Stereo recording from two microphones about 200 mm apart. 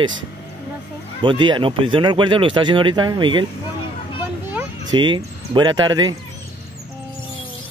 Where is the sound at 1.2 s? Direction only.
25° right (ahead or behind).